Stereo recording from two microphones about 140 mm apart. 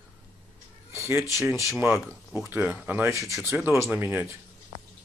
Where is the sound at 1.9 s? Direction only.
10° right (ahead or behind).